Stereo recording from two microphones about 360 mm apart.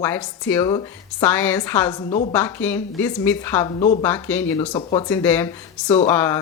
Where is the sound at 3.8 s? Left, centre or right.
Centre.